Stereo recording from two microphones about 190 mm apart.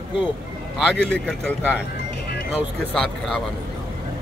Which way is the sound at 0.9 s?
Centre (ahead or behind).